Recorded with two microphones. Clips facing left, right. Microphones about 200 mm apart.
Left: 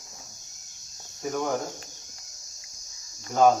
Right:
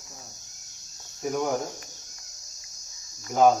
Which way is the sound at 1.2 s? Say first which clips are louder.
Right 1 dB; 10° right (ahead or behind).